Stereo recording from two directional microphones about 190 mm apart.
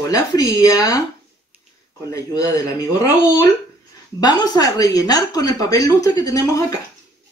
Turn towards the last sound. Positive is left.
turn(degrees=15)  # may be behind; listen again after turning